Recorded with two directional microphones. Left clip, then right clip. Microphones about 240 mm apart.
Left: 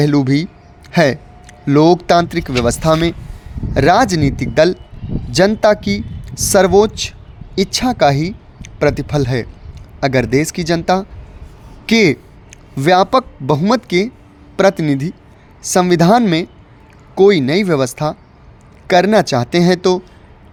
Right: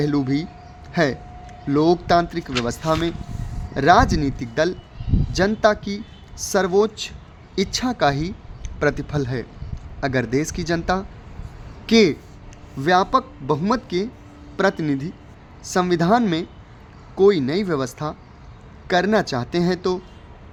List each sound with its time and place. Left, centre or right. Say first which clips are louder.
0.0 s speech: left 7 dB; left